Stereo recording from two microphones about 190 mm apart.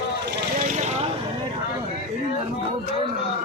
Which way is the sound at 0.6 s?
35° right (ahead or behind).